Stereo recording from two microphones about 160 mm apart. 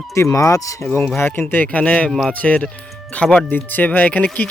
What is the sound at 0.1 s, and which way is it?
Speech, 20° left (ahead or behind).